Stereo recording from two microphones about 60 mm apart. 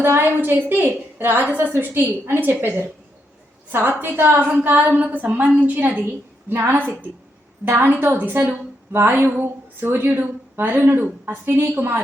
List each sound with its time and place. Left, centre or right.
0.0 s a woman's voice: right